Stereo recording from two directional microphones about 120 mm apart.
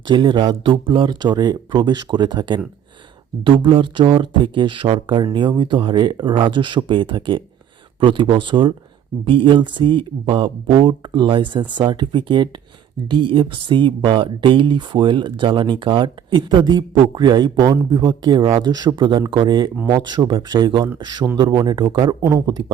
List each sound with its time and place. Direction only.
0.1 s speech: 40° right (ahead or behind)